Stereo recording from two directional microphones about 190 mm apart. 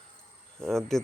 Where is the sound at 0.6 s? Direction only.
Centre (ahead or behind).